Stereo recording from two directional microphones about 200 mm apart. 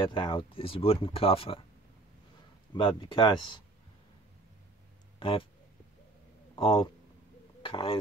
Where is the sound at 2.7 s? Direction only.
25° left (ahead or behind).